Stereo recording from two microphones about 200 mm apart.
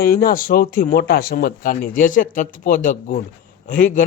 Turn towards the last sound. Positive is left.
turn(degrees=40)  # may be behind; listen again after turning